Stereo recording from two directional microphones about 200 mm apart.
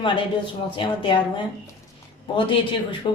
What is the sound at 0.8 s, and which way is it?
Speech, 25° left (ahead or behind).